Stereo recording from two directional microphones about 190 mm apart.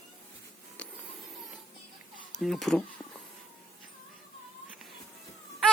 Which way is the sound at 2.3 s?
Centre (ahead or behind).